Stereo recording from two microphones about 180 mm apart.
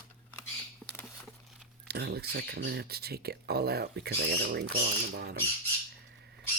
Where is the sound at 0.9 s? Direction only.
10° left (ahead or behind).